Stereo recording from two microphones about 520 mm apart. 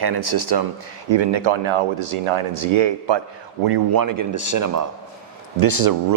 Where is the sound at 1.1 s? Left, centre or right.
Right.